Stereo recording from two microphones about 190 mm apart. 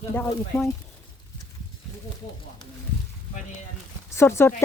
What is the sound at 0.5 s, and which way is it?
Speech, 15° left (ahead or behind).